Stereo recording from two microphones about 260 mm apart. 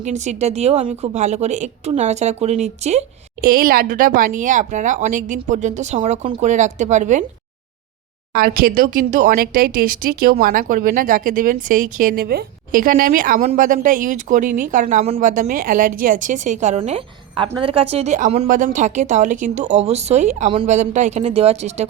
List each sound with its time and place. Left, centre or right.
0.0 s a woman's voice: right
8.3 s a woman's voice: right